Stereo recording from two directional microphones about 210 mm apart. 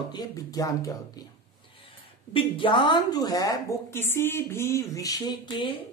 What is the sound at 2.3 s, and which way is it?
A woman's voice, 25° left (ahead or behind).